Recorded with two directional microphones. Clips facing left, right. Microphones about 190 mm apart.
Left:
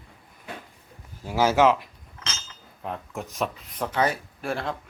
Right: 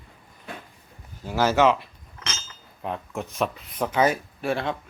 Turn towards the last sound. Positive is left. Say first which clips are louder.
# right 3 dB
turn(degrees=0)  # may be behind; listen again after turning